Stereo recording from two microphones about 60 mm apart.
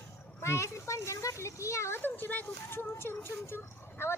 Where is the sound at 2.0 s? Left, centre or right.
Left.